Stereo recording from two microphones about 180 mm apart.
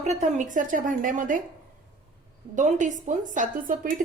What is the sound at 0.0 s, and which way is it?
A woman's voice, 40° right (ahead or behind).